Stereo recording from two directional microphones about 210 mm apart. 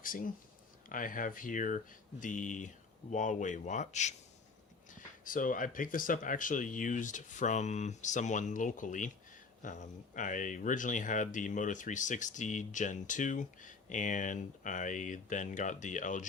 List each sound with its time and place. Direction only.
0.0 s speech: 40° left (ahead or behind)